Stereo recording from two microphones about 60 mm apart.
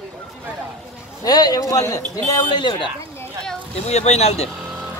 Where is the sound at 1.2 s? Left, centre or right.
Left.